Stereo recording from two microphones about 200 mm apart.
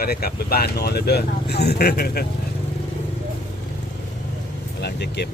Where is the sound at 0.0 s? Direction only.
50° left (ahead or behind).